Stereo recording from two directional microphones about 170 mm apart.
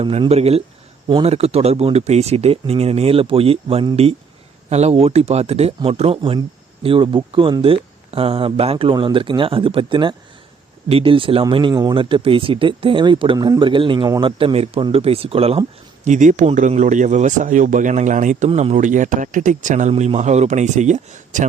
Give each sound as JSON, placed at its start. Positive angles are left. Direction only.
{"t": 0.0, "sound": "speech", "side_deg": -35}
{"t": 16.0, "sound": "a man's voice", "side_deg": -45}